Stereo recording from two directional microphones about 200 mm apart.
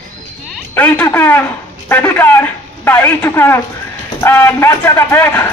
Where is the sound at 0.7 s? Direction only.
10° left (ahead or behind).